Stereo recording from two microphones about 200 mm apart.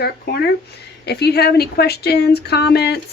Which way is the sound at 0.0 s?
50° left (ahead or behind).